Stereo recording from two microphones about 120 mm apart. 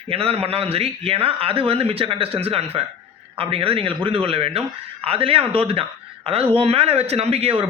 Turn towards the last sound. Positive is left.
turn(degrees=-55)  # may be behind; listen again after turning